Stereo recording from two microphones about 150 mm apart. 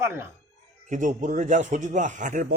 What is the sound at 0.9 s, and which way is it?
A man's voice, 60° right (ahead or behind).